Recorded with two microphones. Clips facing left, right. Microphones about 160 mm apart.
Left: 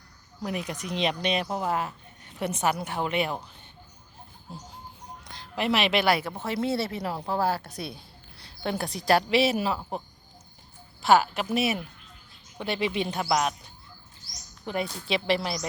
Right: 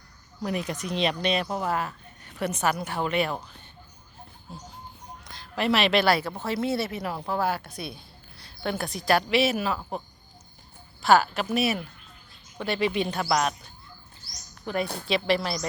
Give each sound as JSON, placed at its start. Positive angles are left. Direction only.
{"t": 0.4, "sound": "speech", "side_deg": 10}
{"t": 5.5, "sound": "a woman's voice", "side_deg": 15}
{"t": 11.0, "sound": "speech", "side_deg": 20}
{"t": 14.7, "sound": "speech", "side_deg": 20}